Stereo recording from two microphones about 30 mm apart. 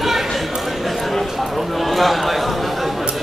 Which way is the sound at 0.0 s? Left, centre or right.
Centre.